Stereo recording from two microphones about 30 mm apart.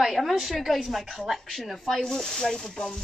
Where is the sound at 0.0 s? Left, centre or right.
Centre.